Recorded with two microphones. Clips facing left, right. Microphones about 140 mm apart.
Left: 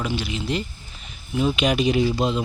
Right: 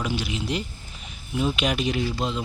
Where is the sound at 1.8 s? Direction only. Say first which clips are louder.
Left 6 dB; 10° left (ahead or behind).